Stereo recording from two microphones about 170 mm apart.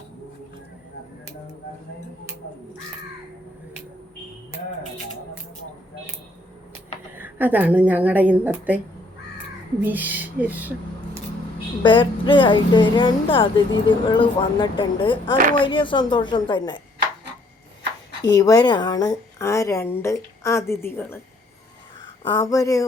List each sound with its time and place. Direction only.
7.2 s a woman's voice: 10° right (ahead or behind)
9.8 s speech: 10° right (ahead or behind)
11.8 s a woman's voice: 30° left (ahead or behind)
18.2 s speech: 20° left (ahead or behind)
22.3 s a woman's voice: 20° left (ahead or behind)